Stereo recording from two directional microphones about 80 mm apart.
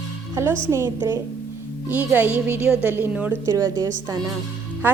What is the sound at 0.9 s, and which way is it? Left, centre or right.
Speech, right.